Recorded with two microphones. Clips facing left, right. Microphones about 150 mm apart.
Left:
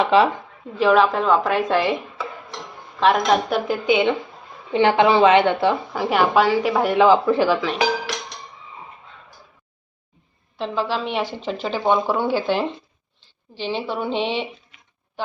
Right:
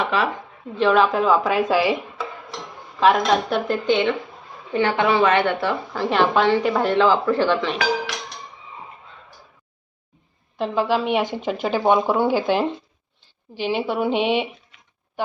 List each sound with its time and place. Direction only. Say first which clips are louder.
0.0 s a woman's voice: left 6 dB; 25° left (ahead or behind)
0.8 s speech: left 1 dB; centre (ahead or behind)
4.7 s a woman's voice: left 3 dB; 20° left (ahead or behind)
7.4 s speech: left 1 dB; 5° left (ahead or behind)
10.6 s speech: right 3 dB; 10° right (ahead or behind)